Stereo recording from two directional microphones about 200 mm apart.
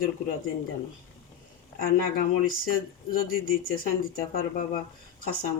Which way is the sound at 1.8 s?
45° left (ahead or behind).